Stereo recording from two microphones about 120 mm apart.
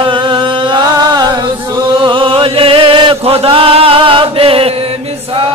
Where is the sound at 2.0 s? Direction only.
45° right (ahead or behind).